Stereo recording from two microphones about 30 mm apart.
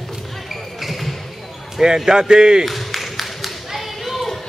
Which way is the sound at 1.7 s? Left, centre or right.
Centre.